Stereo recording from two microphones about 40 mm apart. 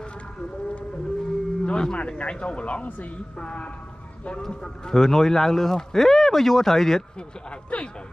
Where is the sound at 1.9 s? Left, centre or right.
Left.